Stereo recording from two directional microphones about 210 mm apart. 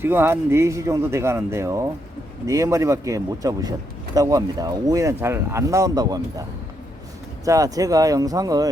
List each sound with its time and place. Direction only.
0.0 s a man's voice: 10° right (ahead or behind)
7.4 s a man's voice: 15° right (ahead or behind)